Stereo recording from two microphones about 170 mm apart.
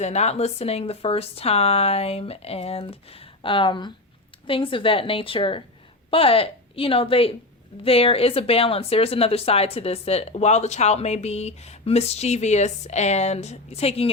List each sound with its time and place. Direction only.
0.0 s speech: 40° left (ahead or behind)